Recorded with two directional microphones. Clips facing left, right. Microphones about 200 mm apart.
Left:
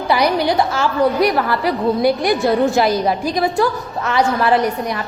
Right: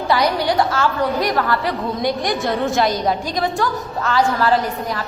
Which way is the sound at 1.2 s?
10° left (ahead or behind).